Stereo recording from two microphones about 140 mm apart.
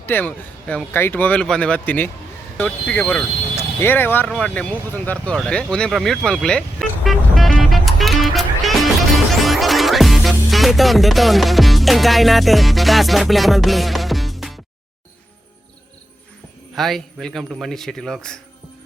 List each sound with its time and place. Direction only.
0.0 s speech: 15° left (ahead or behind)
5.7 s vehicle: 5° left (ahead or behind)
9.3 s music: centre (ahead or behind)
16.7 s a man's voice: centre (ahead or behind)